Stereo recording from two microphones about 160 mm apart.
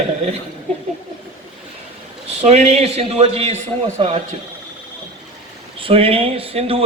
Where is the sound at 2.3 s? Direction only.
40° right (ahead or behind).